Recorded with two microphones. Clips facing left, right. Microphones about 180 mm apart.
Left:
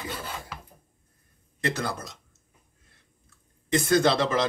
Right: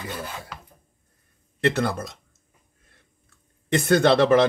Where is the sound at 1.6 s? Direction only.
65° right (ahead or behind).